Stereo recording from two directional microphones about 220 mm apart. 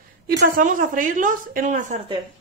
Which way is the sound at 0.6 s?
40° right (ahead or behind).